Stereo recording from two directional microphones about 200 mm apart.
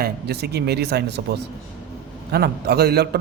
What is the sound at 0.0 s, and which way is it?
Speech, 55° right (ahead or behind).